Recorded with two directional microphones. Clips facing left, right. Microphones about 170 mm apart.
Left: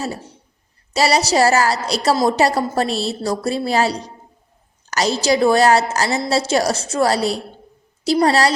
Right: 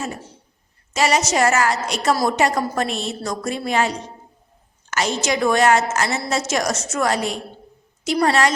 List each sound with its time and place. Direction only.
0.9 s a woman's voice: 35° left (ahead or behind)